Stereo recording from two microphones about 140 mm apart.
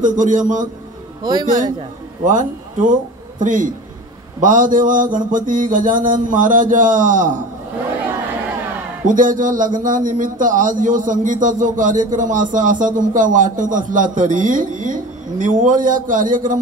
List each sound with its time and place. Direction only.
0.0 s a man's voice: 65° right (ahead or behind)
1.2 s a man's voice: 30° right (ahead or behind)
2.2 s a man's voice: 65° right (ahead or behind)
9.0 s speech: 70° right (ahead or behind)